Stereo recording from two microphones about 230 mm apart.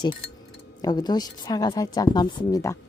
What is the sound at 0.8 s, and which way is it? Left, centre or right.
Speech, centre.